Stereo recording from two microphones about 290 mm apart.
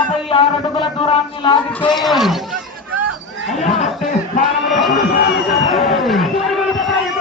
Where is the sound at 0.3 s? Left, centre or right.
Centre.